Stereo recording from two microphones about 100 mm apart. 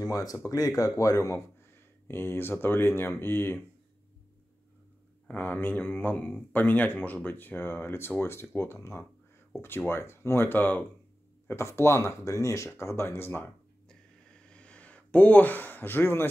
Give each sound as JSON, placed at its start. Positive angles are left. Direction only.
{"t": 0.0, "sound": "speech", "side_deg": 40}
{"t": 5.3, "sound": "speech", "side_deg": 15}
{"t": 13.8, "sound": "a sound", "side_deg": 10}